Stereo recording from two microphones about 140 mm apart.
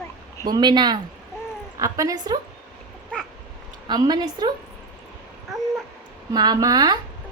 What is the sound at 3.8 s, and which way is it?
Speech, 30° right (ahead or behind).